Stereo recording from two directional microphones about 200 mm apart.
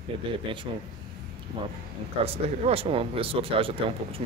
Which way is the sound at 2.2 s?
30° right (ahead or behind).